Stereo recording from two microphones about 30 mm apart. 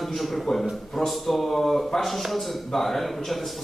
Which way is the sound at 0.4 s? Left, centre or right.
Centre.